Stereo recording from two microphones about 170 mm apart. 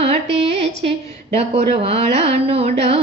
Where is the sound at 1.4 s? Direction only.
35° right (ahead or behind).